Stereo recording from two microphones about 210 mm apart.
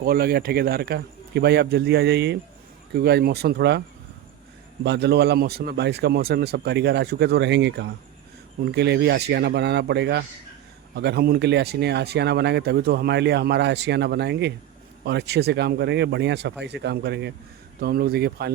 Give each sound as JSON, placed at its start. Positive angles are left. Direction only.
{"t": 0.0, "sound": "speech", "side_deg": -45}